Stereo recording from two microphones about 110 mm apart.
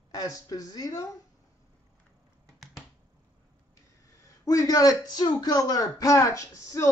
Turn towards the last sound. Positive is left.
turn(degrees=30)  # may be behind; listen again after turning